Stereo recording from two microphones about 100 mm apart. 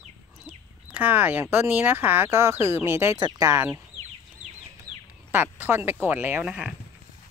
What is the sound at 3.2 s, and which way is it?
Speech, 40° right (ahead or behind).